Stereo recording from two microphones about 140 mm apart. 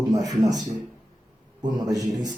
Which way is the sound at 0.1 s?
25° right (ahead or behind).